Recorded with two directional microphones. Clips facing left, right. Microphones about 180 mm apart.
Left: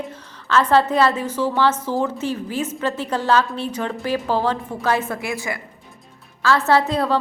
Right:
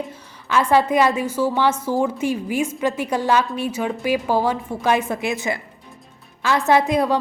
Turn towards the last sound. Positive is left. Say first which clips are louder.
# right 1 dB
turn(degrees=-15)  # may be behind; listen again after turning